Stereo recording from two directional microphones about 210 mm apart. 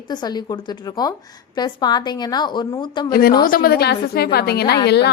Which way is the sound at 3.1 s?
45° left (ahead or behind).